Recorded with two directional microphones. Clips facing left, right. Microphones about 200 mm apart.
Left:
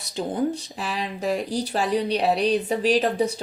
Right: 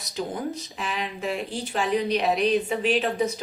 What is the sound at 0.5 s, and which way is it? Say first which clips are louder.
Speech: left 1 dB; 35° left (ahead or behind).